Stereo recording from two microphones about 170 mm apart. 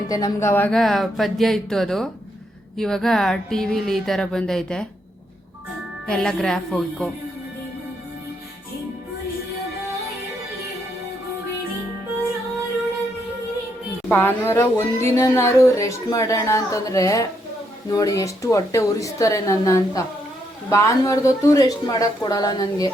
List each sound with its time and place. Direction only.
0.1 s speech: 20° left (ahead or behind)
6.1 s speech: 5° left (ahead or behind)
14.1 s a woman's voice: 10° left (ahead or behind)